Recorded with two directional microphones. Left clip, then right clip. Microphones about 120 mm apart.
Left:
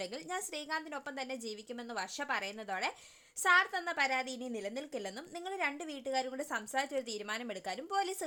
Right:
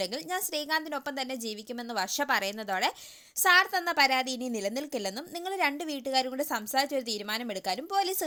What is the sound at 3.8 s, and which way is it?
A woman's voice, 45° right (ahead or behind).